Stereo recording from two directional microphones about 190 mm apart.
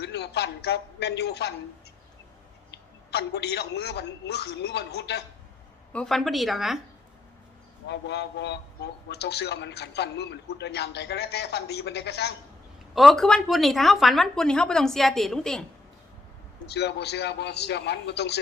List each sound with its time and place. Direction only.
0.0 s a man's voice: 60° left (ahead or behind)
2.7 s a man's voice: 60° left (ahead or behind)
5.9 s a woman's voice: 5° left (ahead or behind)
7.9 s a man's voice: 65° left (ahead or behind)
12.9 s a woman's voice: centre (ahead or behind)
16.6 s a man's voice: 60° left (ahead or behind)